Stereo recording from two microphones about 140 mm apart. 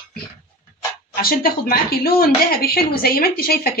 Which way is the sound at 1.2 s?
90° left.